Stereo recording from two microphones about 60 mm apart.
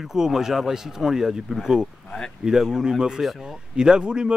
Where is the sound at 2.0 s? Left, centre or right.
Centre.